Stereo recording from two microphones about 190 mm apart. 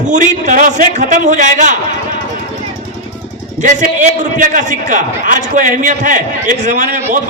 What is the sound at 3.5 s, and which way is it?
A man's voice, 40° right (ahead or behind).